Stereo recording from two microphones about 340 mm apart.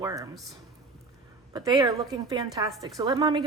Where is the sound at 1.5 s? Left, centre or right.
Centre.